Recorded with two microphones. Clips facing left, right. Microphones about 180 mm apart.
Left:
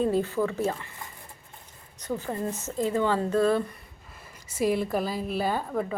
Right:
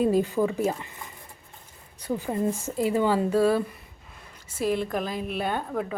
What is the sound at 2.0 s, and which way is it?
Speech, 10° right (ahead or behind).